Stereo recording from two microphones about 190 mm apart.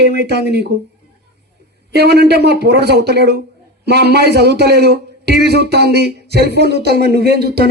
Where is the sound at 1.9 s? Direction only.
60° right (ahead or behind).